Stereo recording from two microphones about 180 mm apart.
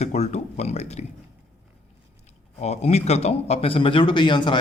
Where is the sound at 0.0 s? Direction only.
40° left (ahead or behind).